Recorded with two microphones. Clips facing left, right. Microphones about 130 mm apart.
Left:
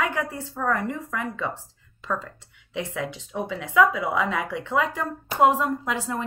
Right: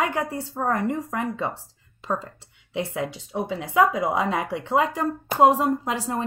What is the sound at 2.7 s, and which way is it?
Speech, 35° right (ahead or behind).